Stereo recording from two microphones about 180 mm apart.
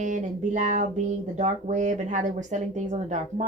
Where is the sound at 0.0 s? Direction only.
40° right (ahead or behind).